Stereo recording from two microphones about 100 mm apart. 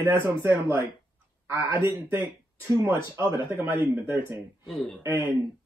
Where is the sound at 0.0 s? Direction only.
25° right (ahead or behind).